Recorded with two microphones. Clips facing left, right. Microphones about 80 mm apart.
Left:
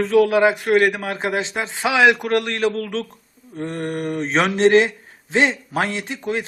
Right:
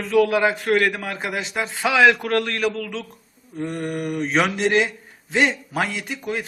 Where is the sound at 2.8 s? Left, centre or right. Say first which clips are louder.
Left 4 dB; left.